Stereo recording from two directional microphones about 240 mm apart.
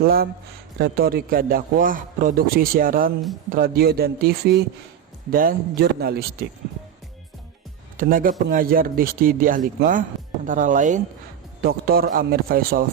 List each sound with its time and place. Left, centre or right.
0.0 s a man's voice: right
7.9 s a man's voice: right